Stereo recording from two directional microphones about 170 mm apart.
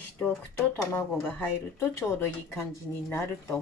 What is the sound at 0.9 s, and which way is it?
Speech, 10° left (ahead or behind).